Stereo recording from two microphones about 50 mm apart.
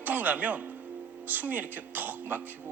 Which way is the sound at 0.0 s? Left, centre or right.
Right.